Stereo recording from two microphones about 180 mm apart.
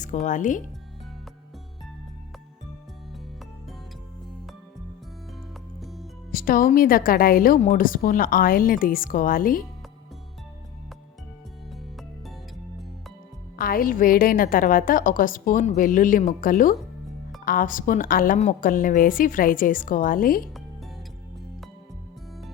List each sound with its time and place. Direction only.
0.0 s speech: 45° left (ahead or behind)
5.8 s music: centre (ahead or behind)
6.3 s a woman's voice: 55° left (ahead or behind)
13.6 s a woman's voice: 50° left (ahead or behind)